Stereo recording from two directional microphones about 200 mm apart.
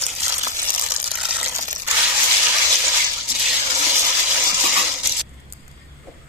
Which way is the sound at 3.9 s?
10° right (ahead or behind).